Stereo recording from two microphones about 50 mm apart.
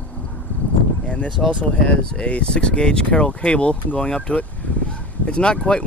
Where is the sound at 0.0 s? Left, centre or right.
Centre.